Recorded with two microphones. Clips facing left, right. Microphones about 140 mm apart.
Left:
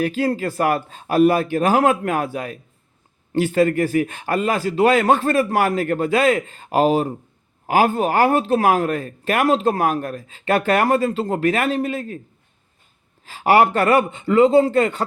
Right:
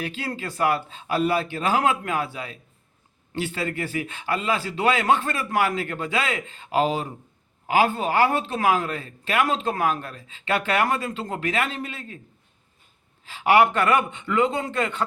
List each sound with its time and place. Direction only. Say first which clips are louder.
0.0 s speech: left 10 dB; 40° left (ahead or behind)
13.2 s speech: left 3 dB; 40° left (ahead or behind)